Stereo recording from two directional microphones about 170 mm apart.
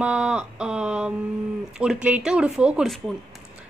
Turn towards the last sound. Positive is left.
turn(degrees=0)  # may be behind; listen again after turning